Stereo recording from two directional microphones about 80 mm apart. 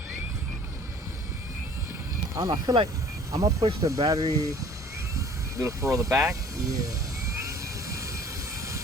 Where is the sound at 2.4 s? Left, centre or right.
Right.